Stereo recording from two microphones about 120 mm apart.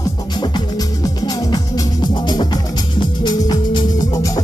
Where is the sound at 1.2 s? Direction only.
40° left (ahead or behind).